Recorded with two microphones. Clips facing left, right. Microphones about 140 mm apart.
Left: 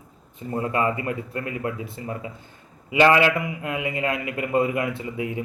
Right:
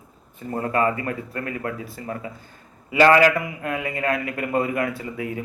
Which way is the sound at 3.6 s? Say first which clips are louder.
Right 2 dB; 20° left (ahead or behind).